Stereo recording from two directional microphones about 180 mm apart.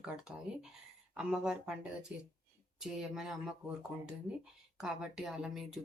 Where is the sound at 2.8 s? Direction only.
5° right (ahead or behind).